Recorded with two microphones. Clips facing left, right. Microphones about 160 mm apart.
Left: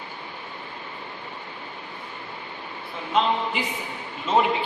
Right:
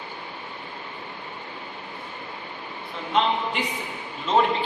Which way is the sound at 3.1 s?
5° left (ahead or behind).